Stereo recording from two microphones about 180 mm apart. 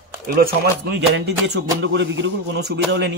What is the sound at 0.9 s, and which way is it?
Speech, 75° right (ahead or behind).